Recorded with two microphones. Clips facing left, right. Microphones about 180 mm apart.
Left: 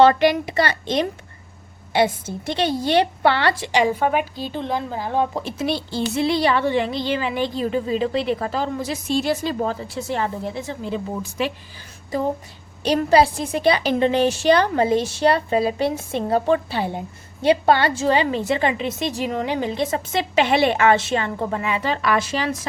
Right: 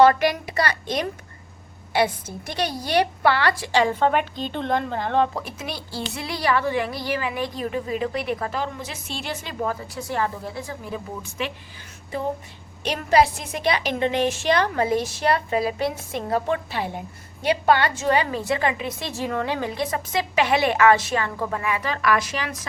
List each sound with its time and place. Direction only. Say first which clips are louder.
0.0 s a woman's voice: left 2 dB; 25° left (ahead or behind); by 5.3 s 10° left (ahead or behind)
5.3 s speech: left 7 dB; 25° left (ahead or behind)
11.2 s a woman's voice: left 5 dB; 35° left (ahead or behind)
12.8 s a woman's voice: left 3 dB; 35° left (ahead or behind)